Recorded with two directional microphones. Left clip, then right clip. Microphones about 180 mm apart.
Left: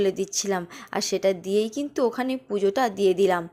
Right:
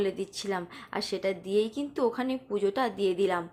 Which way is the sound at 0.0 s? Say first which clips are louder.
Left 6 dB; 35° left (ahead or behind).